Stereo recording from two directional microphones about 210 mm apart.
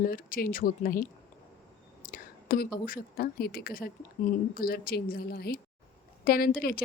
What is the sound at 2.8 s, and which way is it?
Speech, 45° left (ahead or behind).